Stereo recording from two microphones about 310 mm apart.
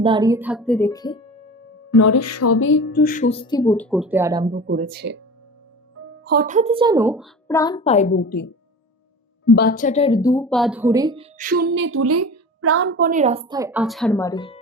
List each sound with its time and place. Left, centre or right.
0.0 s speech: centre
1.9 s speech: left; by 3.9 s centre
3.9 s a woman's voice: centre
4.6 s speech: right
6.2 s a woman's voice: right; by 7.3 s centre
7.4 s a woman's voice: centre